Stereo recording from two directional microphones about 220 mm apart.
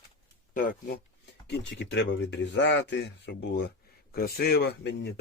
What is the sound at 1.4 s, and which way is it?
Speech, 55° left (ahead or behind).